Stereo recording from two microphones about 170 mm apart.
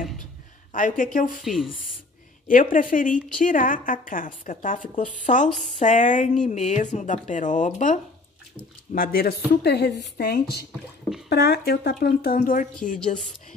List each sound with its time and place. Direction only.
0.7 s speech: 50° left (ahead or behind)
1.4 s speech: centre (ahead or behind)
2.4 s speech: 50° left (ahead or behind)
8.9 s speech: 60° left (ahead or behind)